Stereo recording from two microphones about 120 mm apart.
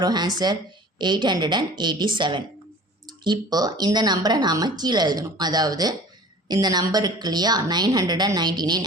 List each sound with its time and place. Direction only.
0.0 s speech: 35° right (ahead or behind)